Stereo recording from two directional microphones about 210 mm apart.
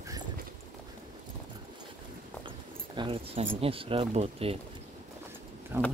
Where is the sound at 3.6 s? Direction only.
25° right (ahead or behind).